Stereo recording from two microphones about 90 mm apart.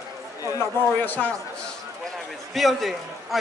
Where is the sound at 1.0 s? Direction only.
15° left (ahead or behind).